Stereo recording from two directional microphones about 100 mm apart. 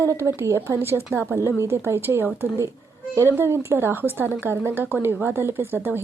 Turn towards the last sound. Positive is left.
turn(degrees=-20)  # may be behind; listen again after turning